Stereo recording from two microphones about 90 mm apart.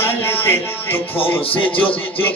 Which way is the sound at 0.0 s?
25° left (ahead or behind).